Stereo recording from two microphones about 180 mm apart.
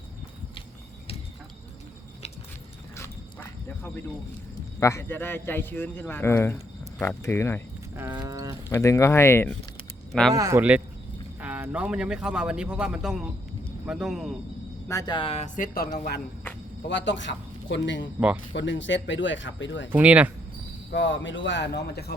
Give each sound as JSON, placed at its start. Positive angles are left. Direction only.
{"t": 4.8, "sound": "a man's voice", "side_deg": 15}
{"t": 7.9, "sound": "a sound", "side_deg": -20}
{"t": 8.7, "sound": "a man's voice", "side_deg": 15}
{"t": 10.1, "sound": "speech", "side_deg": 0}
{"t": 10.3, "sound": "speech", "side_deg": -15}
{"t": 14.8, "sound": "speech", "side_deg": 20}
{"t": 15.5, "sound": "speech", "side_deg": 50}
{"t": 16.9, "sound": "speech", "side_deg": 90}
{"t": 19.9, "sound": "speech", "side_deg": -10}
{"t": 20.9, "sound": "speech", "side_deg": 90}